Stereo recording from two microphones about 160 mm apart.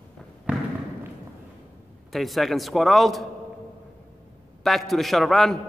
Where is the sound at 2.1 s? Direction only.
Centre (ahead or behind).